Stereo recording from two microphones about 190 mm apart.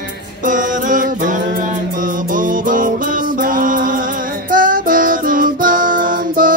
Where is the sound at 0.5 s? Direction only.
45° right (ahead or behind).